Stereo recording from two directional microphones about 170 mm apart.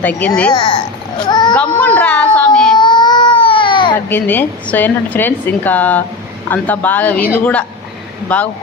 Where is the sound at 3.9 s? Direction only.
10° left (ahead or behind).